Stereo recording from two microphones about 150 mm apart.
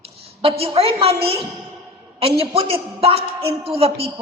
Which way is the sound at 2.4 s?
40° right (ahead or behind).